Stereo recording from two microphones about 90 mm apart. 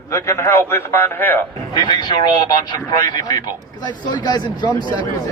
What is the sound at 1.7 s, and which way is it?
Speech, 60° left (ahead or behind).